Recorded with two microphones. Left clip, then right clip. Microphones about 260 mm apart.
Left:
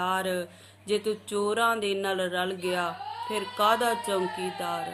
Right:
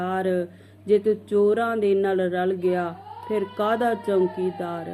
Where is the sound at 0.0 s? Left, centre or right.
Centre.